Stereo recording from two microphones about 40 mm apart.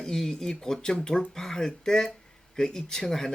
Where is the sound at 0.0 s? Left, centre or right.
Centre.